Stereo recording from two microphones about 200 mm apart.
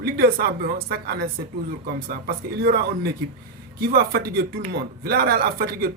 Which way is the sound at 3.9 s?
50° right (ahead or behind).